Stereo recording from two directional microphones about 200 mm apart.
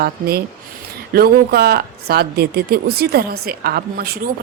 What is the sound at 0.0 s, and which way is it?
Speech, 50° right (ahead or behind).